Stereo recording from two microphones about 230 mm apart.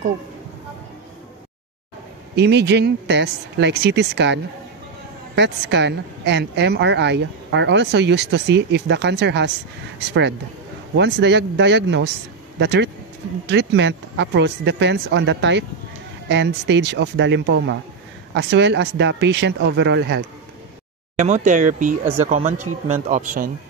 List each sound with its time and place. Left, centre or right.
2.3 s a woman's voice: right
21.2 s speech: right
23.0 s speech: right